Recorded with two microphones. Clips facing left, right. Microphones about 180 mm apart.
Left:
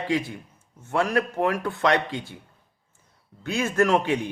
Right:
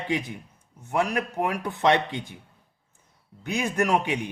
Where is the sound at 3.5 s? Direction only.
15° right (ahead or behind).